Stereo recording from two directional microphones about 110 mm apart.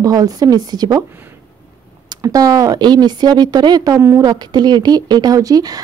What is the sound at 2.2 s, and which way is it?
A woman's voice, 30° right (ahead or behind).